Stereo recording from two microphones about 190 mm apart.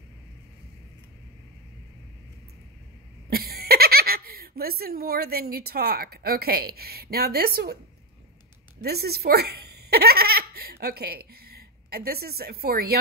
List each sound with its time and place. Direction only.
3.3 s speech: 55° right (ahead or behind)
8.8 s giggle: 55° right (ahead or behind)